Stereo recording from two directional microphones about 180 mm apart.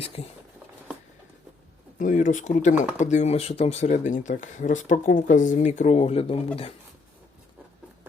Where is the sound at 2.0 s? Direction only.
45° left (ahead or behind).